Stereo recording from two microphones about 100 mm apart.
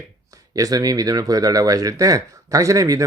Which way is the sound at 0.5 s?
35° right (ahead or behind).